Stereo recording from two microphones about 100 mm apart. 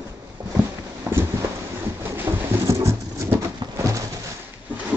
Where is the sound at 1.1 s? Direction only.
25° right (ahead or behind).